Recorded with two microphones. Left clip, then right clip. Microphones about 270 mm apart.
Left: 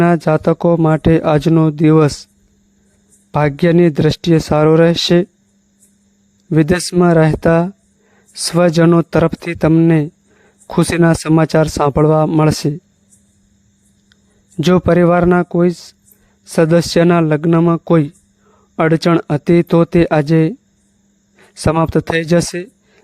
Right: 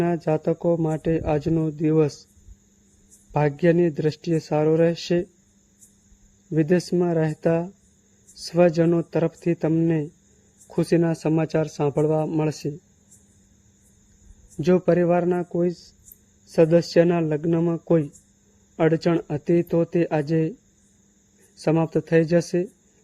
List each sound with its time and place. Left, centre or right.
0.0 s speech: left
3.3 s speech: left
6.5 s speech: left
14.6 s speech: left